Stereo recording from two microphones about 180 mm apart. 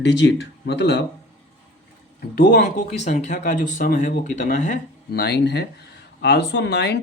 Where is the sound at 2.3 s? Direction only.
55° left (ahead or behind).